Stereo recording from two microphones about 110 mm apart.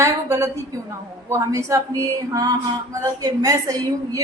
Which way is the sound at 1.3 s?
30° right (ahead or behind).